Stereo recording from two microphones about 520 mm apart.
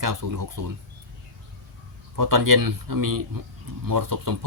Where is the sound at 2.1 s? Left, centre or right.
Right.